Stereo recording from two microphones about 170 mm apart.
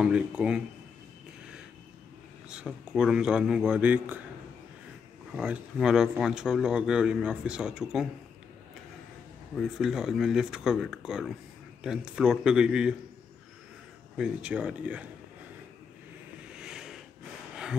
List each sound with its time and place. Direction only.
0.0 s speech: 5° right (ahead or behind)
2.5 s speech: 5° right (ahead or behind)
5.3 s speech: 5° right (ahead or behind)
9.6 s speech: centre (ahead or behind)
14.1 s speech: 5° right (ahead or behind)
16.5 s a sound: 5° right (ahead or behind)